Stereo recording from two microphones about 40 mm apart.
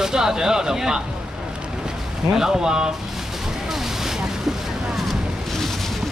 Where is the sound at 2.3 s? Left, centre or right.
Centre.